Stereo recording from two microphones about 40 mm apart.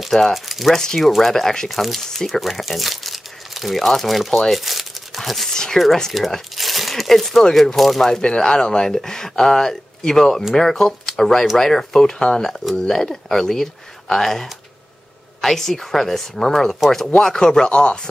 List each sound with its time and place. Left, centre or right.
0.3 s speech: centre
5.5 s speech: centre
6.1 s speech: centre
6.5 s crumpling: centre
7.5 s speech: centre
8.2 s speech: centre
17.6 s speech: left